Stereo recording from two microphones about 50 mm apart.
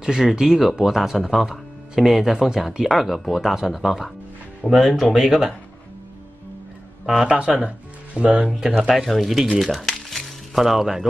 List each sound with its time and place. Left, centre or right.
0.0 s speech: centre
7.1 s speech: centre
8.7 s speech: centre